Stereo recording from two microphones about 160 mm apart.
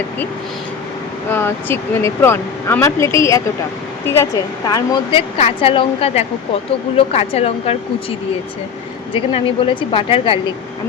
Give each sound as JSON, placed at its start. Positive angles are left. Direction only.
{"t": 1.3, "sound": "speech", "side_deg": 15}
{"t": 5.4, "sound": "speech", "side_deg": 35}
{"t": 9.1, "sound": "speech", "side_deg": 35}